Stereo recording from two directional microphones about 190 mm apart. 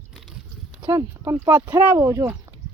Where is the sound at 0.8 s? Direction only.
15° right (ahead or behind).